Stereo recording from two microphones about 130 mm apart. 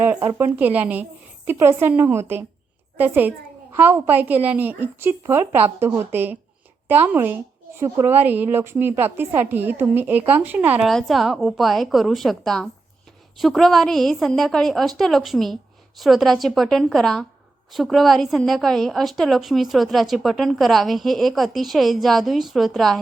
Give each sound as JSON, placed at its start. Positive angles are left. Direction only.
{"t": 0.2, "sound": "a woman's voice", "side_deg": -20}
{"t": 10.8, "sound": "a woman's voice", "side_deg": 0}